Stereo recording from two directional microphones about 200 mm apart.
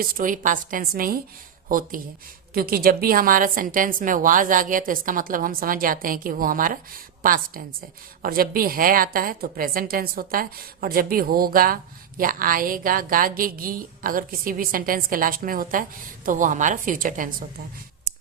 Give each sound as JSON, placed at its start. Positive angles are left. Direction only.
{"t": 0.0, "sound": "a woman's voice", "side_deg": -40}
{"t": 2.5, "sound": "a woman's voice", "side_deg": -50}